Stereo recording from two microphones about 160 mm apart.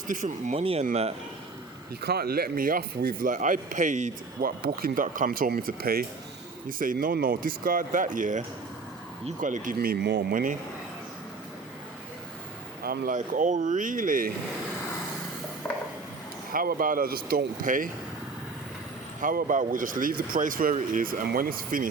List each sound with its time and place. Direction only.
0.1 s speech: 55° right (ahead or behind)
0.6 s speech: 35° right (ahead or behind)
2.0 s speech: 75° right (ahead or behind); by 4.1 s 50° right (ahead or behind)
4.4 s speech: 70° right (ahead or behind)
5.0 s speech: 55° right (ahead or behind)
6.7 s speech: 60° right (ahead or behind)
9.4 s speech: 55° right (ahead or behind)
12.8 s speech: 60° right (ahead or behind)
16.5 s speech: 60° right (ahead or behind)
19.2 s speech: 60° right (ahead or behind)